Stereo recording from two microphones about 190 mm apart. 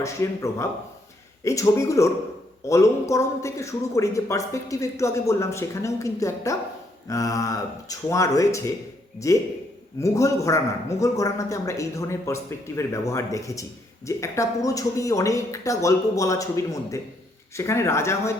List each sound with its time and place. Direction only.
0.0 s speech: 15° left (ahead or behind)